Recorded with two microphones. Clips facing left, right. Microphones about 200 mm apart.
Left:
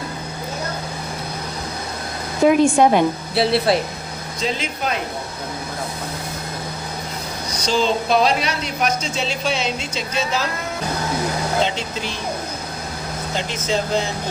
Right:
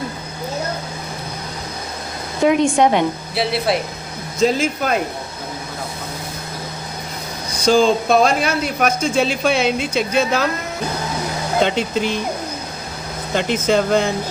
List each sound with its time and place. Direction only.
2.6 s speech: 20° right (ahead or behind)
3.3 s speech: centre (ahead or behind)
4.4 s speech: 45° right (ahead or behind)
7.6 s speech: 50° right (ahead or behind)
13.3 s speech: 55° right (ahead or behind)